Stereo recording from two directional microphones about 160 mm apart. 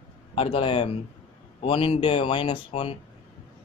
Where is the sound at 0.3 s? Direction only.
35° left (ahead or behind).